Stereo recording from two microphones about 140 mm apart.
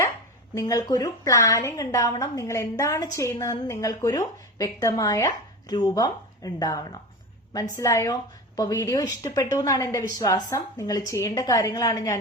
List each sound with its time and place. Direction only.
0.5 s a woman's voice: 25° left (ahead or behind)